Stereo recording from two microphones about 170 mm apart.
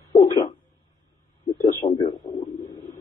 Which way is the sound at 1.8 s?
30° left (ahead or behind).